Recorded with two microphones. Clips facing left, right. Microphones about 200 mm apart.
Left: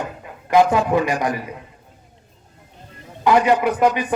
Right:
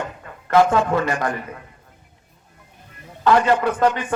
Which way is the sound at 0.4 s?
15° left (ahead or behind).